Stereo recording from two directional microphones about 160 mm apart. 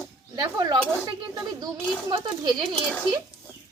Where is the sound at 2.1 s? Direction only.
30° right (ahead or behind).